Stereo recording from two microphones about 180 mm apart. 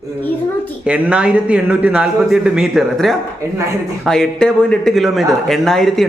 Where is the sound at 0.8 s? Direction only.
5° right (ahead or behind).